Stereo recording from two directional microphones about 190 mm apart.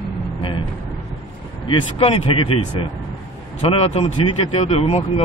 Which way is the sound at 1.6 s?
30° left (ahead or behind).